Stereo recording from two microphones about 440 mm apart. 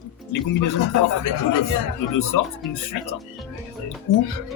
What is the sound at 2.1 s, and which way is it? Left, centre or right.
Speech, left.